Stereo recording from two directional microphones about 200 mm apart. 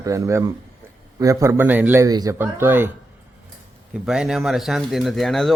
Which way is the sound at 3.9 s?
5° right (ahead or behind).